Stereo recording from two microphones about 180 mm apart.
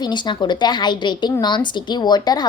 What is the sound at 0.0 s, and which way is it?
A woman's voice, 25° left (ahead or behind).